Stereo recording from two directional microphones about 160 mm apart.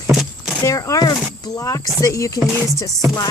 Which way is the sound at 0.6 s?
20° left (ahead or behind).